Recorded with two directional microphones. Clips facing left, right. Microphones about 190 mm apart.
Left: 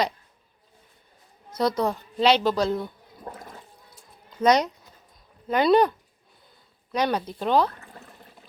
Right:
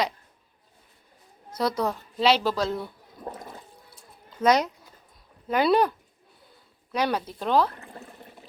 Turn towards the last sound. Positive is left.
turn(degrees=0)  # may be behind; listen again after turning